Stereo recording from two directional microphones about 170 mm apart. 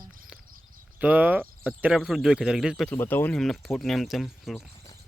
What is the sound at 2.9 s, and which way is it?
Speech, 15° left (ahead or behind).